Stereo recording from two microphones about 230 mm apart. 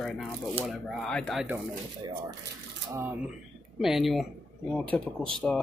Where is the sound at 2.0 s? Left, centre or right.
Centre.